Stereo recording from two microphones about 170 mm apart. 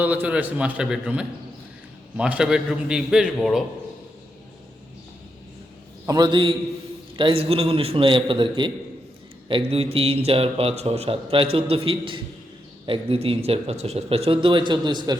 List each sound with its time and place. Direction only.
0.0 s a man's voice: 10° right (ahead or behind)
6.1 s a man's voice: 25° right (ahead or behind)